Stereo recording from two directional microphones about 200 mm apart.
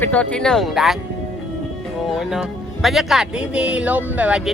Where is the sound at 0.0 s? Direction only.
5° left (ahead or behind).